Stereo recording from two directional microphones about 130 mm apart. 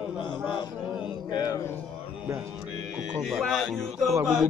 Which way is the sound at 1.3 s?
30° left (ahead or behind).